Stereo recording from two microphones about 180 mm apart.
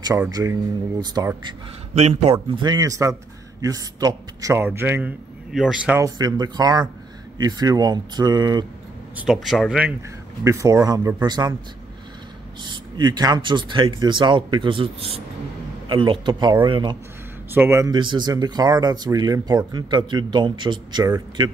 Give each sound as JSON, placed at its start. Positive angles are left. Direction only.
{"t": 0.3, "sound": "speech", "side_deg": -20}
{"t": 2.0, "sound": "speech", "side_deg": -35}
{"t": 2.5, "sound": "a man's voice", "side_deg": -25}
{"t": 5.9, "sound": "speech", "side_deg": -20}
{"t": 9.1, "sound": "speech", "side_deg": -5}
{"t": 10.4, "sound": "a man's voice", "side_deg": -15}
{"t": 12.6, "sound": "speech", "side_deg": -25}
{"t": 17.5, "sound": "speech", "side_deg": -15}